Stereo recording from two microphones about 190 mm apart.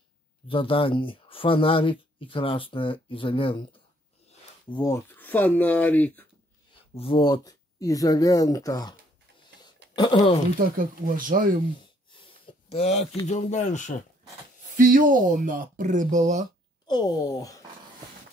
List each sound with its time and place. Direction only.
0.5 s speech: 30° left (ahead or behind); by 6.2 s 10° left (ahead or behind)
6.7 s speech: 30° left (ahead or behind)
9.9 s speech: 25° left (ahead or behind)
10.6 s speech: 45° right (ahead or behind)
12.1 s a sound: 25° left (ahead or behind)
13.3 s speech: 40° left (ahead or behind)
14.8 s speech: 45° right (ahead or behind)
16.8 s speech: 20° left (ahead or behind)